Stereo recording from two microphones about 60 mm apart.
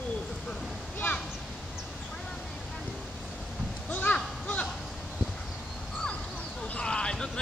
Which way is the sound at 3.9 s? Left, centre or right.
Left.